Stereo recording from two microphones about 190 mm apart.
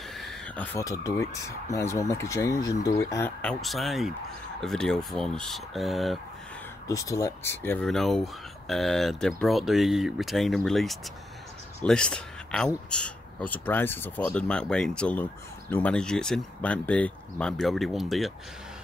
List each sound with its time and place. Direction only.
0.1 s owl: centre (ahead or behind)
0.7 s speech: 15° left (ahead or behind)
3.6 s a man's voice: centre (ahead or behind)
6.9 s a man's voice: 15° left (ahead or behind); by 18.3 s centre (ahead or behind)